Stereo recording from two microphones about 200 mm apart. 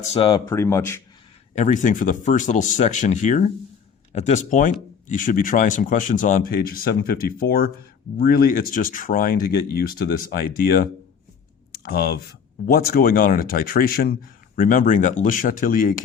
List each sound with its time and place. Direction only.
0.1 s speech: 25° left (ahead or behind)
0.4 s speech: 15° left (ahead or behind)
1.5 s speech: 35° left (ahead or behind)